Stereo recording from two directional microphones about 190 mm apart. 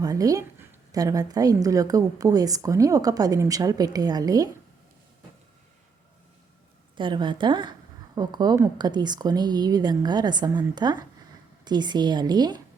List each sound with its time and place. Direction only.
0.0 s a woman's voice: 20° right (ahead or behind)
6.9 s a woman's voice: 25° right (ahead or behind)